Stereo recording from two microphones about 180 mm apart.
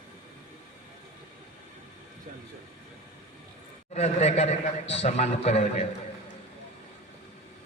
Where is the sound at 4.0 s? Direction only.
35° left (ahead or behind).